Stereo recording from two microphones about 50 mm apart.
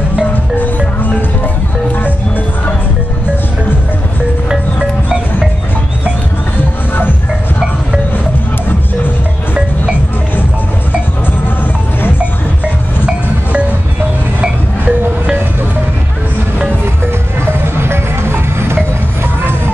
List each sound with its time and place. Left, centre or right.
13.0 s a sound: right
14.4 s music: right
17.5 s music: right